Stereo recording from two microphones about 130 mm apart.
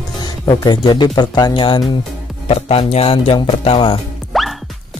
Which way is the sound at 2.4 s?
50° left (ahead or behind).